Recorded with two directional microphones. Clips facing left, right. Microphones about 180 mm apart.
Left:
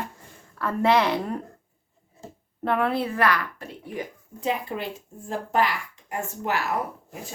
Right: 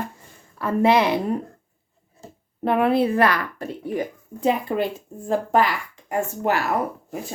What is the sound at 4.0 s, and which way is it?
Speech, 50° right (ahead or behind).